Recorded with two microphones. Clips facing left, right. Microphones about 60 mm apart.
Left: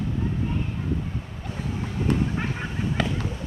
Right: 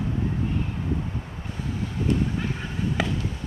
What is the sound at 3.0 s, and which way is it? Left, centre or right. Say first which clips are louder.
Fireworks: left 1 dB; centre.